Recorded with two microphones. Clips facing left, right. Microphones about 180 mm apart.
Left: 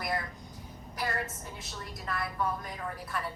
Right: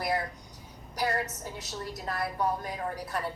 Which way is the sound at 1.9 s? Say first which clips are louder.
Right 2 dB; 40° right (ahead or behind).